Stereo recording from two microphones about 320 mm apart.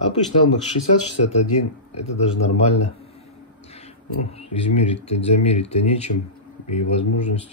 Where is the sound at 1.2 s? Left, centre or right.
Left.